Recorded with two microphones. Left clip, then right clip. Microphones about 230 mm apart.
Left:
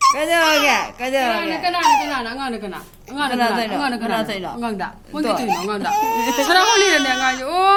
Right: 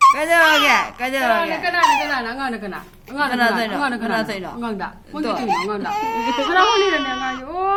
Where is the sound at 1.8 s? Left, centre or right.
Centre.